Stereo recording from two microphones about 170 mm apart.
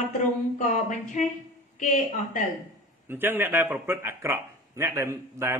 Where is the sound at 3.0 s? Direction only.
10° right (ahead or behind).